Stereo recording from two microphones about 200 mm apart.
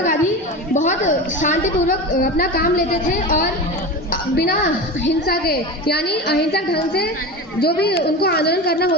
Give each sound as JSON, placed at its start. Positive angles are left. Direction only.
{"t": 0.7, "sound": "a woman's voice", "side_deg": 40}
{"t": 5.0, "sound": "a woman's voice", "side_deg": 55}